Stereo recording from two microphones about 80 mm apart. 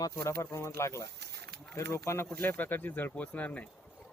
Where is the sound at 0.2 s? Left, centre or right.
Left.